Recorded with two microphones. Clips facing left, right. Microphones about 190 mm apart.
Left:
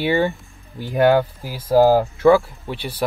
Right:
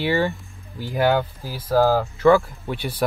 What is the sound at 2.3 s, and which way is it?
Speech, centre (ahead or behind).